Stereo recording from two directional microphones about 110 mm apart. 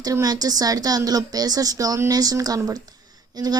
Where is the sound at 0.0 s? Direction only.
35° right (ahead or behind).